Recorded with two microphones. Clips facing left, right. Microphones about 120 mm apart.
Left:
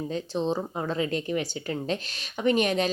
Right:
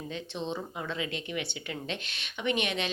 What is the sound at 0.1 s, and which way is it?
Speech, 35° left (ahead or behind).